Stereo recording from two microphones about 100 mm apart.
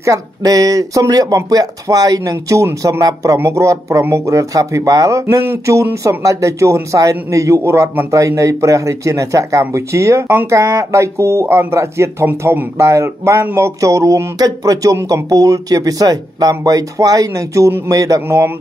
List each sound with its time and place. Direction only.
0.0 s speech: 35° right (ahead or behind)